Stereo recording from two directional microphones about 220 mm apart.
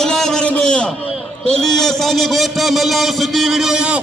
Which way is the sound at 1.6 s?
Centre (ahead or behind).